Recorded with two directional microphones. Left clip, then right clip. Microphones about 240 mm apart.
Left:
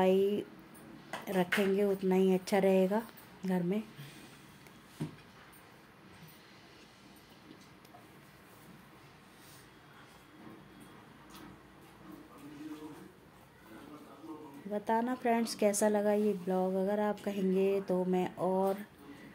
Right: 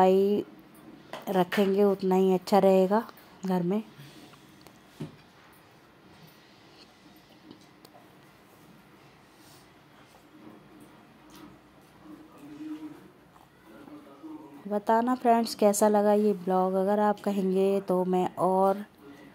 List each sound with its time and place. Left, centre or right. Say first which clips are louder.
0.0 s speech: right 7 dB; centre
14.7 s speech: right 8 dB; centre